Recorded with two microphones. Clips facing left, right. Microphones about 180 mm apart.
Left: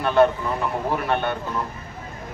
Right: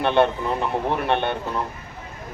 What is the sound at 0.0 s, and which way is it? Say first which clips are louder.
Speech: left 1 dB; 25° right (ahead or behind).